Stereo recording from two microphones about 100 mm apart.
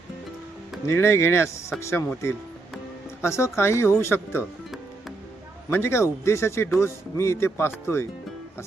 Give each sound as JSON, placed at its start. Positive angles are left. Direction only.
{"t": 0.9, "sound": "speech", "side_deg": 25}
{"t": 5.7, "sound": "speech", "side_deg": 25}